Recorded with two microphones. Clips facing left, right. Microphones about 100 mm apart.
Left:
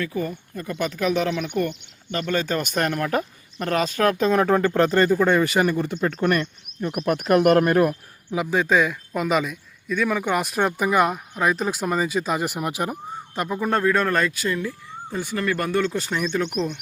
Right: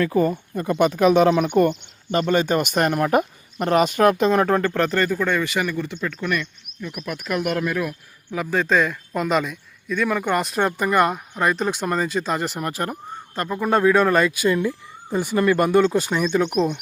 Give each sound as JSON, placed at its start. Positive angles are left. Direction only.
{"t": 0.0, "sound": "speech", "side_deg": -45}
{"t": 0.3, "sound": "speech", "side_deg": -30}
{"t": 1.3, "sound": "speech", "side_deg": -40}
{"t": 4.8, "sound": "speech", "side_deg": 25}
{"t": 8.3, "sound": "speech", "side_deg": 15}